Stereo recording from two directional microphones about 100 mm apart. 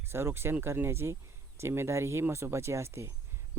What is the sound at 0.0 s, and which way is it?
Speech, 25° right (ahead or behind).